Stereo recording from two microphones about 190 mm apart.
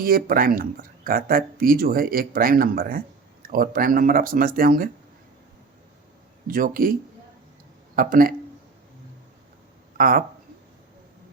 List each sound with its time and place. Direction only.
0.0 s speech: 50° right (ahead or behind)
6.5 s speech: 50° right (ahead or behind)
7.9 s speech: 50° right (ahead or behind)
10.0 s speech: 50° right (ahead or behind)